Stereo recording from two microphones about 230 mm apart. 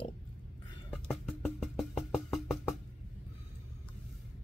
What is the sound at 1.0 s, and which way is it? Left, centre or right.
Music, centre.